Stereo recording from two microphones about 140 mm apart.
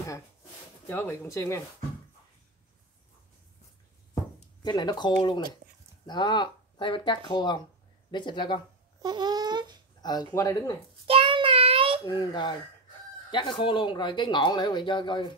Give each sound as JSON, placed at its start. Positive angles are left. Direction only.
{"t": 0.8, "sound": "speech", "side_deg": 15}
{"t": 4.6, "sound": "speech", "side_deg": 30}
{"t": 9.0, "sound": "a sound", "side_deg": -30}
{"t": 10.0, "sound": "speech", "side_deg": 30}
{"t": 11.1, "sound": "child singing", "side_deg": -40}
{"t": 12.0, "sound": "speech", "side_deg": 30}